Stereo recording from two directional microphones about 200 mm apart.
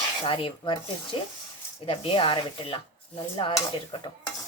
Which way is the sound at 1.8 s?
25° left (ahead or behind).